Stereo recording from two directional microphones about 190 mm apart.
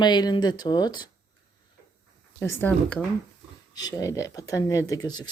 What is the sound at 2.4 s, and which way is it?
Speech, 10° left (ahead or behind).